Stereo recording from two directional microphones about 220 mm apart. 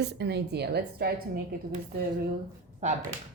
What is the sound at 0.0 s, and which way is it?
Speech, 50° right (ahead or behind).